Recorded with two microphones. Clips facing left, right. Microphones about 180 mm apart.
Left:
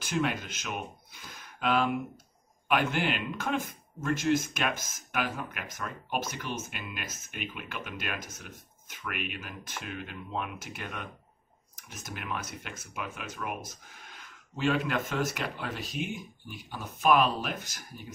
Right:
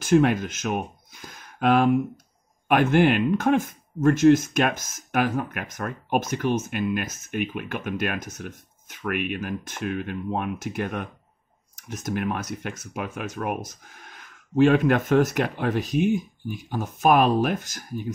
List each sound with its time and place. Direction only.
0.0 s speech: 50° right (ahead or behind)